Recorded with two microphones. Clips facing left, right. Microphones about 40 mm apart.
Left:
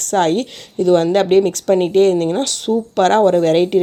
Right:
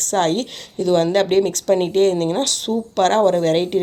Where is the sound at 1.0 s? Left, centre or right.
Left.